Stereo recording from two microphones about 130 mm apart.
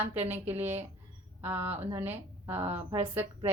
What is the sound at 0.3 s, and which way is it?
A woman's voice, 15° right (ahead or behind).